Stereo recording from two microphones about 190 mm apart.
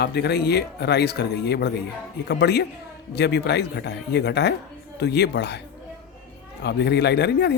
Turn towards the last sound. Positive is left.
turn(degrees=60)  # may be behind; listen again after turning